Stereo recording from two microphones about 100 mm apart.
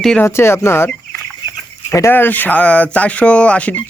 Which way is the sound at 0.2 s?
25° left (ahead or behind).